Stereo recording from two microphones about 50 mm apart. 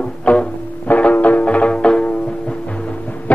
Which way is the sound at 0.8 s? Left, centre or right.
Left.